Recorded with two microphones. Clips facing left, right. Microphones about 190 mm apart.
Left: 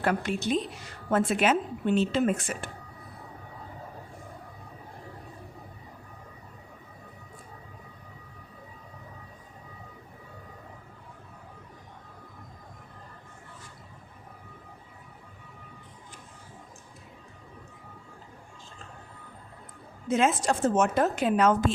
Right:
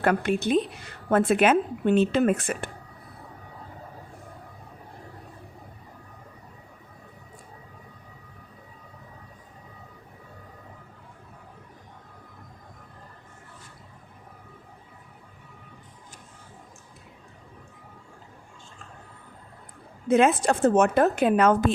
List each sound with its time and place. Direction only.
0.0 s a woman's voice: 55° right (ahead or behind)
20.1 s a woman's voice: 60° right (ahead or behind)